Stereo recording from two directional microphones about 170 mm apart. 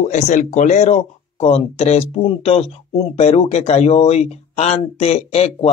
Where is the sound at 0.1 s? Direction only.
45° left (ahead or behind).